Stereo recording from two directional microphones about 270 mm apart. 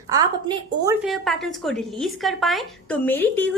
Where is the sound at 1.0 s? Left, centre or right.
Centre.